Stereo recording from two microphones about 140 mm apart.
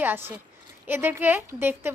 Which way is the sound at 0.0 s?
15° right (ahead or behind).